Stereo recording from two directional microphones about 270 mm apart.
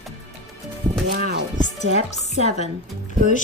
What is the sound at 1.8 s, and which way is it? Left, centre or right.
Speech, left.